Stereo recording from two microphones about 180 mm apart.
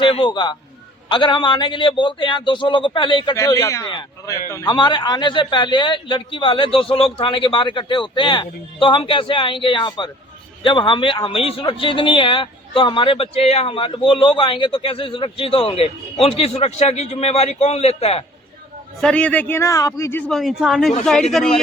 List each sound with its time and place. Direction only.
0.0 s a man's voice: 30° left (ahead or behind)
19.0 s a man's voice: 5° left (ahead or behind)